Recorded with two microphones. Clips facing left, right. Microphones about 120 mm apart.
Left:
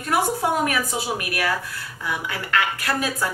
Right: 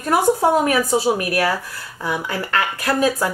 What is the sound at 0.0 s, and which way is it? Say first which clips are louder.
A woman's voice: right 6 dB; 35° right (ahead or behind).